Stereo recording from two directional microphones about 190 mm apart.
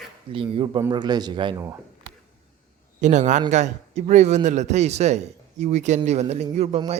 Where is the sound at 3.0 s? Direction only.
40° right (ahead or behind).